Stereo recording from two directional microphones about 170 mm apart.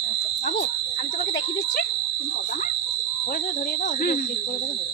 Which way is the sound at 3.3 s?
60° left (ahead or behind).